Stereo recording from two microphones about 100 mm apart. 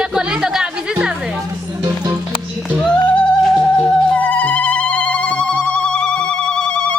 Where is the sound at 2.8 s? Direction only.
5° left (ahead or behind).